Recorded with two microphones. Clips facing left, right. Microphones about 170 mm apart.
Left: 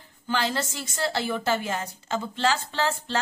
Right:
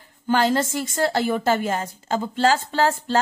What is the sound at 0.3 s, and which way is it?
A woman's voice, 50° right (ahead or behind).